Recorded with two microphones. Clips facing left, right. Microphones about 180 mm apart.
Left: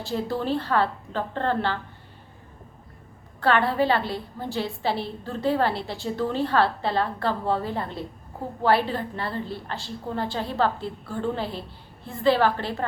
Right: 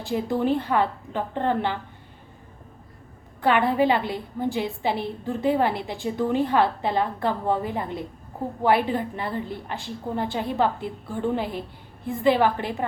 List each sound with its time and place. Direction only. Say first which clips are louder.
0.0 s a woman's voice: right 3 dB; 15° right (ahead or behind)
3.4 s a woman's voice: right 1 dB; 15° right (ahead or behind)